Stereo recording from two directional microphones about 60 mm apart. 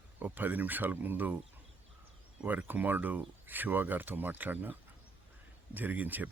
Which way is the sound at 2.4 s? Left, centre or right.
Right.